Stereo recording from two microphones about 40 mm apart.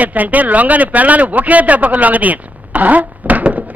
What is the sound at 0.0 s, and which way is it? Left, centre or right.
A man's voice, right.